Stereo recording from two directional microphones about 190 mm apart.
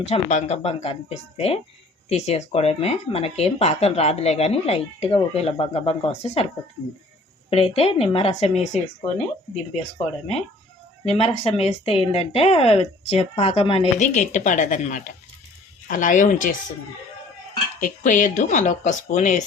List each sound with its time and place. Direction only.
0.0 s speech: 35° left (ahead or behind)
7.5 s speech: 30° left (ahead or behind)
11.0 s speech: 30° left (ahead or behind)
17.7 s speech: 45° left (ahead or behind)